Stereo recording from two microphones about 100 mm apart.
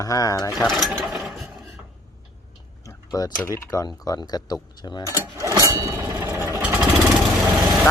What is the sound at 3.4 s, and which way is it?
Speech, 35° left (ahead or behind).